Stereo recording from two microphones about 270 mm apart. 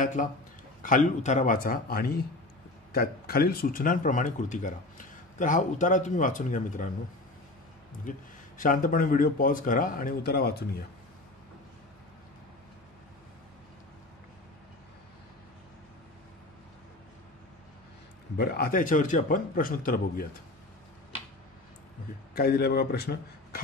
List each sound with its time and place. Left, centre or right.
0.0 s a man's voice: left
8.5 s a man's voice: left
18.4 s a man's voice: left
22.3 s a man's voice: left